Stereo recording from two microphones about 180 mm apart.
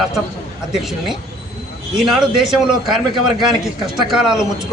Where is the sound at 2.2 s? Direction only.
5° right (ahead or behind).